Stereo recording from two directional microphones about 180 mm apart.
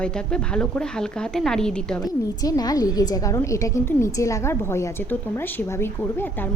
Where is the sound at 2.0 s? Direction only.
20° left (ahead or behind).